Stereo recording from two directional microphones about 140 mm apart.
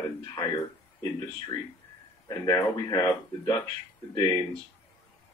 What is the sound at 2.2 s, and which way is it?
Speech, 30° left (ahead or behind).